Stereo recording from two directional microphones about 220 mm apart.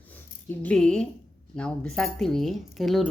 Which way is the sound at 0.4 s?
5° left (ahead or behind).